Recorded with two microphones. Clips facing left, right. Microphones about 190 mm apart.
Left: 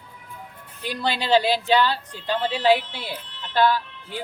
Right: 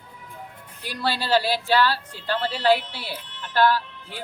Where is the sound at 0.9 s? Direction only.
20° left (ahead or behind).